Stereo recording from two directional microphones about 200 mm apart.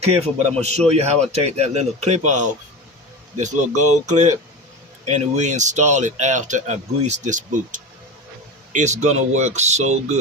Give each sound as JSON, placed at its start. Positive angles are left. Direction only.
{"t": 0.0, "sound": "speech", "side_deg": -30}